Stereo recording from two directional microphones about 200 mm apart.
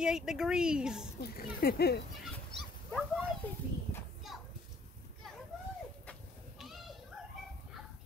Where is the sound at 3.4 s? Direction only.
10° left (ahead or behind).